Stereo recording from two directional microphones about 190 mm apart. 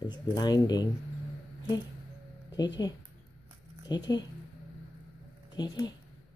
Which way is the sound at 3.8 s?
20° left (ahead or behind).